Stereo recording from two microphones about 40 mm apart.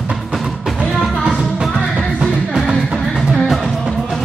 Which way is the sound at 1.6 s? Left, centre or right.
Centre.